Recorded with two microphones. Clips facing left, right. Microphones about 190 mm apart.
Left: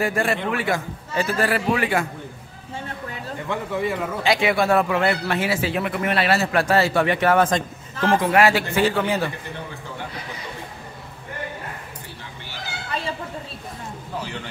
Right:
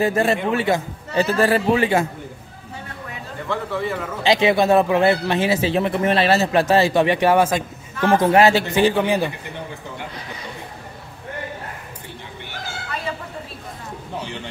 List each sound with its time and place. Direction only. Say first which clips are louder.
0.0 s speech: right 4 dB; 20° right (ahead or behind)
3.4 s speech: right 1 dB; 15° left (ahead or behind)
4.2 s speech: right 4 dB; 25° right (ahead or behind)
8.2 s speech: right 4 dB; 25° right (ahead or behind)